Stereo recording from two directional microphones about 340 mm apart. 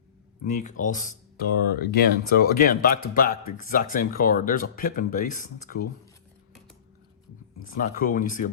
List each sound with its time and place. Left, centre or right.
0.4 s speech: left
7.8 s speech: left